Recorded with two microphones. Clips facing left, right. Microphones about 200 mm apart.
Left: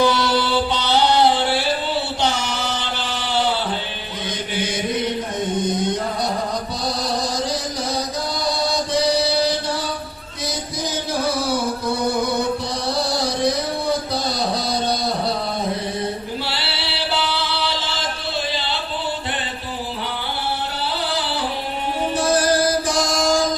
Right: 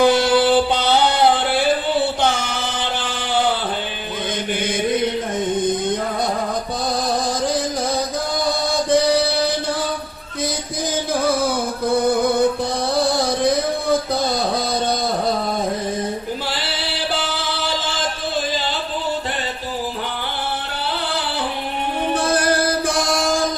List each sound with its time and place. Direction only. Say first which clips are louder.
0.0 s music: right 4 dB; 50° right (ahead or behind)
11.1 s music: right 2 dB; 50° right (ahead or behind)
16.5 s music: right 2 dB; 45° right (ahead or behind)
22.1 s music: left 1 dB; 55° right (ahead or behind)